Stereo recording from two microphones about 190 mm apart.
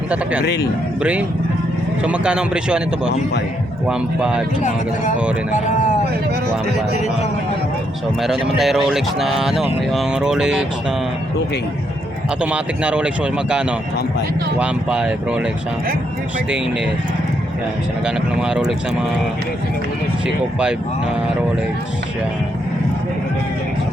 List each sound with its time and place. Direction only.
0.1 s speech: 5° right (ahead or behind)
0.4 s a man's voice: 60° left (ahead or behind)
2.0 s speech: 5° right (ahead or behind)
8.2 s speech: centre (ahead or behind)
12.4 s speech: 5° right (ahead or behind)
18.0 s speech: 5° right (ahead or behind)
20.2 s speech: 5° right (ahead or behind)